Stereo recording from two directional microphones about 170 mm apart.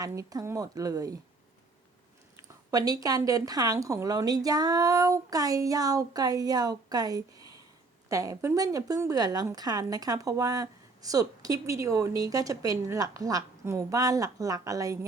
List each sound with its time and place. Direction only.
0.0 s a woman's voice: 20° right (ahead or behind)
2.6 s a woman's voice: 20° right (ahead or behind)